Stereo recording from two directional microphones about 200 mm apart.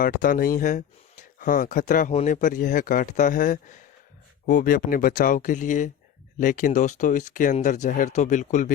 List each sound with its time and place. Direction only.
0.0 s speech: 45° left (ahead or behind)